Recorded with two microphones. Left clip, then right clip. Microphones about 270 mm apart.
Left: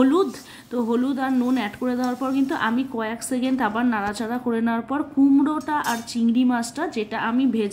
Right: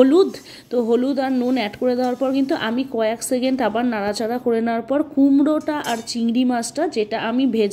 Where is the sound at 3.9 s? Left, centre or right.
Left.